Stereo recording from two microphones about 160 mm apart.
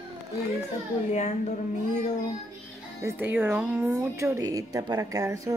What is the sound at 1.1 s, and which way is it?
Speech, 45° left (ahead or behind).